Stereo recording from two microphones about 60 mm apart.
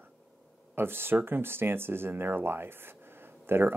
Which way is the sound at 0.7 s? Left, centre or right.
Right.